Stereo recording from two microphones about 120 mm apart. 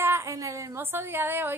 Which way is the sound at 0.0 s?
20° right (ahead or behind).